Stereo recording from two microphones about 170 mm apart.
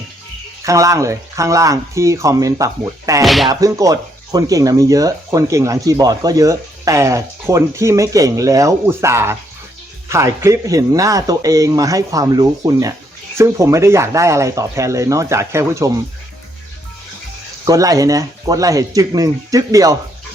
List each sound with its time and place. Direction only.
0.6 s speech: 20° right (ahead or behind)
3.2 s speech: centre (ahead or behind)
3.5 s speech: 20° right (ahead or behind)
17.7 s speech: 20° right (ahead or behind)